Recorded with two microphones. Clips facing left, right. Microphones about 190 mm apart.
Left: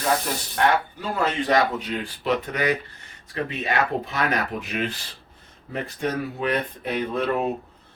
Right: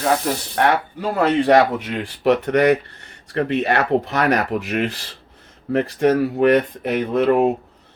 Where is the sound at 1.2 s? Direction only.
65° right (ahead or behind).